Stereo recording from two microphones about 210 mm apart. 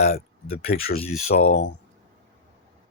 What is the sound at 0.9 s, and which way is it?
Speech, 30° left (ahead or behind).